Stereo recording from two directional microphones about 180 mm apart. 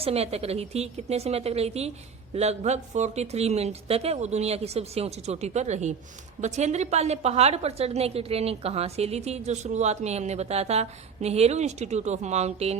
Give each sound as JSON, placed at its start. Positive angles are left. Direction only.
{"t": 0.0, "sound": "a woman's voice", "side_deg": -35}